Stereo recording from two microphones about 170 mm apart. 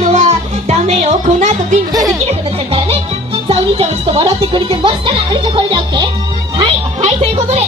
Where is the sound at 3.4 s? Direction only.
35° right (ahead or behind).